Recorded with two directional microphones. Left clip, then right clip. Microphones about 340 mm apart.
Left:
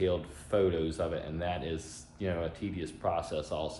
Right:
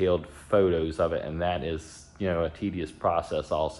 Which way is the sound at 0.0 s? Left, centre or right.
Right.